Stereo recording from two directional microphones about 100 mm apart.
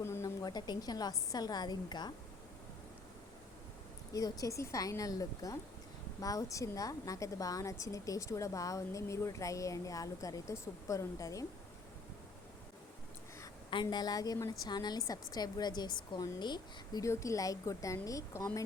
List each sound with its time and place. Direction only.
0.0 s a sound: 25° left (ahead or behind)
0.4 s a woman's voice: 40° left (ahead or behind)
4.1 s a woman's voice: 35° left (ahead or behind)
13.9 s a woman's voice: 40° left (ahead or behind)
17.0 s a woman's voice: 30° left (ahead or behind)